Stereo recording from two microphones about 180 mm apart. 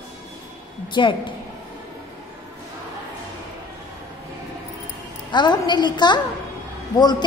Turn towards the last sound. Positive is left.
turn(degrees=25)  # may be behind; listen again after turning